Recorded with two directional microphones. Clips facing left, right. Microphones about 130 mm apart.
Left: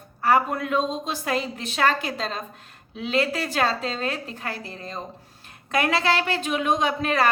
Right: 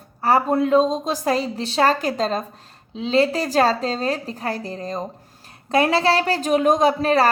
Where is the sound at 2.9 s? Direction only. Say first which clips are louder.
Right 6 dB; 30° right (ahead or behind).